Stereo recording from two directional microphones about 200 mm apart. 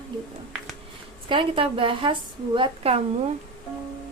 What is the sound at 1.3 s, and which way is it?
A woman's voice, 25° right (ahead or behind).